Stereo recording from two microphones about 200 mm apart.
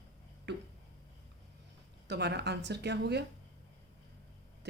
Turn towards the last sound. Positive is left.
turn(degrees=-55)  # may be behind; listen again after turning